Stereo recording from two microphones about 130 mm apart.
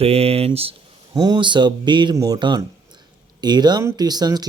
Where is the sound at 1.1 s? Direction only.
30° right (ahead or behind).